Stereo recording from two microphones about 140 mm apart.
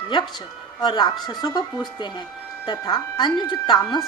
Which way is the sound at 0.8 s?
30° left (ahead or behind).